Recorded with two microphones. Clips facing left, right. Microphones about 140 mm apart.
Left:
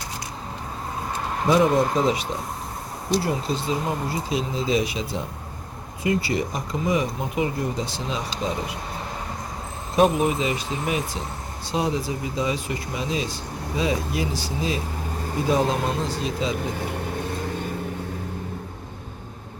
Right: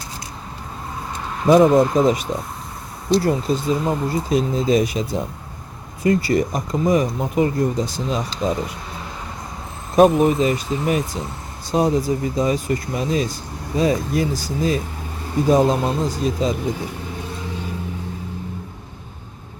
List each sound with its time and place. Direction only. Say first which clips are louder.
1.5 s speech: right 6 dB; 45° right (ahead or behind)
9.9 s speech: right 6 dB; 45° right (ahead or behind)
16.7 s vehicle: left 1 dB; 55° left (ahead or behind)